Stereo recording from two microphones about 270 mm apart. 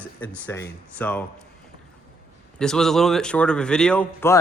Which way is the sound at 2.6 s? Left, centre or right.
Centre.